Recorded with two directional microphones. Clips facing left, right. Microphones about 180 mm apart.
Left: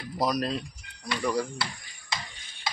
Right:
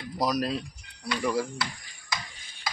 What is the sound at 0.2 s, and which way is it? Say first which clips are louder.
Speech: even; centre (ahead or behind).